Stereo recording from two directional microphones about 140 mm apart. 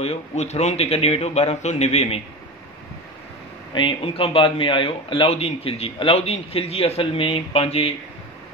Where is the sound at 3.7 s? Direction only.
40° left (ahead or behind).